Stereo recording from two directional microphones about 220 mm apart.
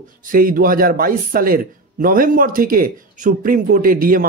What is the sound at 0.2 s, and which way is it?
A man's voice, 40° right (ahead or behind).